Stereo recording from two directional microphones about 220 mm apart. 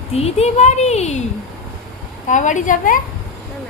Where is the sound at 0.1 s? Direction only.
30° left (ahead or behind).